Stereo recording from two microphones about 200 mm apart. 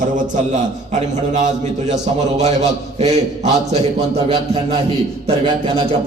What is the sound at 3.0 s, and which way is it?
A man's voice, 35° right (ahead or behind).